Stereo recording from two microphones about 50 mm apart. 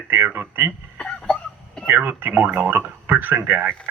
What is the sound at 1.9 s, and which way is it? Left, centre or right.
Speech, right.